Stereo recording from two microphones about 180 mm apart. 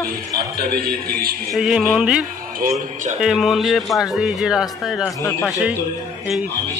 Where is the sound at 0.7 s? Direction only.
60° right (ahead or behind).